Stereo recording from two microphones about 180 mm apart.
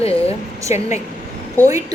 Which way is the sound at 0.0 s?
35° left (ahead or behind).